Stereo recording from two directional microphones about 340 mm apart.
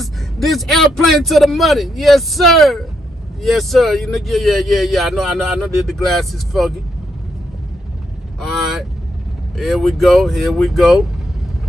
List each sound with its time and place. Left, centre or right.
0.0 s a man's voice: centre
8.4 s a man's voice: centre